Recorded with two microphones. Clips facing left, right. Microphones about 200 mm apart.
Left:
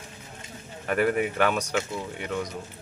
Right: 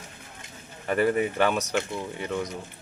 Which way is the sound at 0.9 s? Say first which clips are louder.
Right 1 dB; centre (ahead or behind).